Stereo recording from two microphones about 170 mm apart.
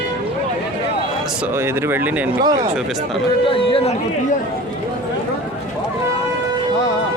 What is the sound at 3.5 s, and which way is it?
Speech, 30° left (ahead or behind).